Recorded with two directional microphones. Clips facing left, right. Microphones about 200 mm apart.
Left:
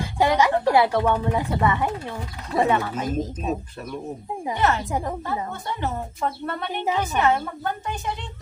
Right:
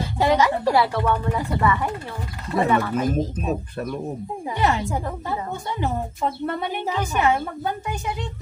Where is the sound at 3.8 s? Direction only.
50° right (ahead or behind).